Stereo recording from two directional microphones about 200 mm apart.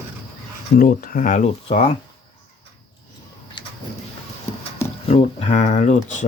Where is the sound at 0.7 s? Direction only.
45° left (ahead or behind); by 1.8 s 30° left (ahead or behind).